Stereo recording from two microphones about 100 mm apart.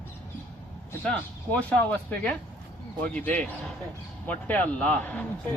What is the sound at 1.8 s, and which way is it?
Speech, 15° left (ahead or behind).